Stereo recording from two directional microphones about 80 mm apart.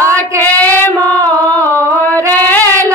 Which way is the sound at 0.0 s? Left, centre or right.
Left.